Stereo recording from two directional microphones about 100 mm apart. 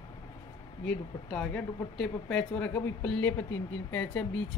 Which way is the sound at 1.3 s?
10° left (ahead or behind).